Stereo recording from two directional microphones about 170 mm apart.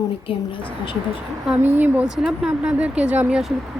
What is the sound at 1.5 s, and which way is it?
A woman's voice, 10° right (ahead or behind).